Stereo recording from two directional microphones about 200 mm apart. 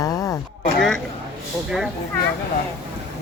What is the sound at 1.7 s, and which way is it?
Speech, centre (ahead or behind).